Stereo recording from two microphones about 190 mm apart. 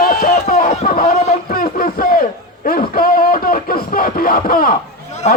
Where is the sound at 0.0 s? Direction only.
45° left (ahead or behind).